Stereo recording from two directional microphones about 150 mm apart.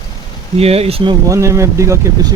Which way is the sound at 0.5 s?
40° right (ahead or behind).